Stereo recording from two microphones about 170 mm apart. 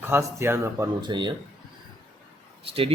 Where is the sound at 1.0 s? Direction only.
25° right (ahead or behind).